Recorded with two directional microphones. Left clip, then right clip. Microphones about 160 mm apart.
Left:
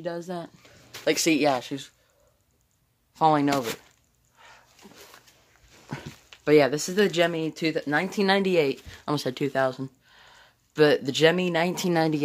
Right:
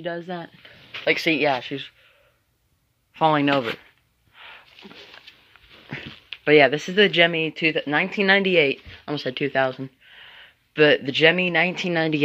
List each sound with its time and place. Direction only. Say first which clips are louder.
0.0 s speech: right 3 dB; 5° right (ahead or behind)
1.0 s speech: right 2 dB; 20° left (ahead or behind)
3.2 s speech: right 2 dB; 10° right (ahead or behind)
4.4 s a sound: right 8 dB; 20° right (ahead or behind)
6.4 s speech: right 4 dB; centre (ahead or behind)
8.9 s speech: even; 25° left (ahead or behind)
9.5 s speech: right 3 dB; centre (ahead or behind)